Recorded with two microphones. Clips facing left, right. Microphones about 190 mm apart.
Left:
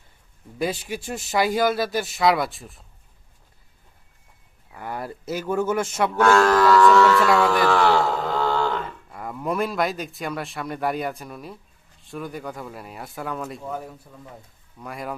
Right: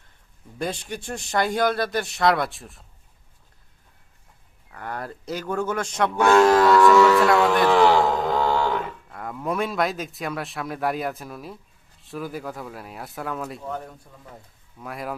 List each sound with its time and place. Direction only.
0.6 s a man's voice: 5° left (ahead or behind)
4.7 s speech: 10° left (ahead or behind)
6.2 s speech: 20° right (ahead or behind)
7.3 s a man's voice: centre (ahead or behind)
7.7 s mantra: 15° right (ahead or behind)
9.0 s a man's voice: centre (ahead or behind)